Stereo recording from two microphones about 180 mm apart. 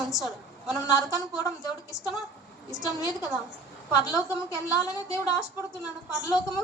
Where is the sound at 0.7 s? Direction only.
20° left (ahead or behind).